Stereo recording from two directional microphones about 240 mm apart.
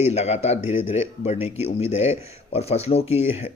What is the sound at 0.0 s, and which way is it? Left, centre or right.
A man's voice, left.